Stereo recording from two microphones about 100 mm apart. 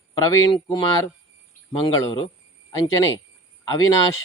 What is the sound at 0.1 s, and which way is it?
Speech, 45° left (ahead or behind).